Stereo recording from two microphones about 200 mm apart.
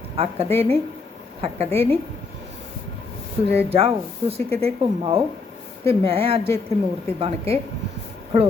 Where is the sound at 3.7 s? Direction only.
30° right (ahead or behind).